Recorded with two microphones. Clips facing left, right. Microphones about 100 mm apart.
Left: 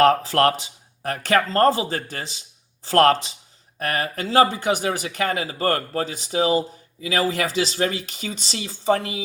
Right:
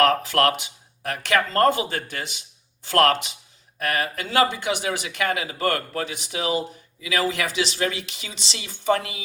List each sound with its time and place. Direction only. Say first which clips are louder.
0.0 s speech: left 3 dB; 35° left (ahead or behind)